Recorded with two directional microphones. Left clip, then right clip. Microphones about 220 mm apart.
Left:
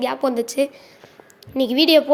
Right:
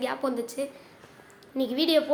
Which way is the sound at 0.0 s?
30° left (ahead or behind).